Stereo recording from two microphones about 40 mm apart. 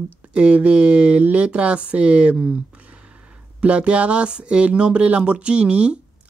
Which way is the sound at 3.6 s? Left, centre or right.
Right.